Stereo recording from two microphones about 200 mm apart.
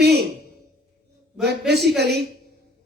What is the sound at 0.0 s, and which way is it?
Sigh, 55° right (ahead or behind).